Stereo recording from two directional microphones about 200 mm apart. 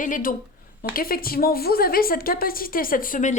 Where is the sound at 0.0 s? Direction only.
40° left (ahead or behind).